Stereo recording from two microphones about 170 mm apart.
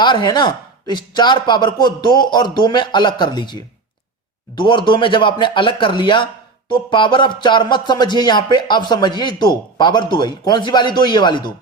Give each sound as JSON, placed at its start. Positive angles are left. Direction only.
{"t": 0.0, "sound": "speech", "side_deg": 25}